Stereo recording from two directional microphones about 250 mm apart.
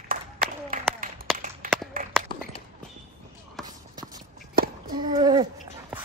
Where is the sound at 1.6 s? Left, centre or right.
Right.